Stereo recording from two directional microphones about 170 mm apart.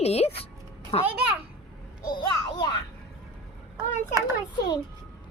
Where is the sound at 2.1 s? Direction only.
25° left (ahead or behind).